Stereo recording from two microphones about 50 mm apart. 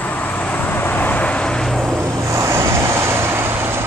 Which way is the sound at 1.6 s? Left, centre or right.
Centre.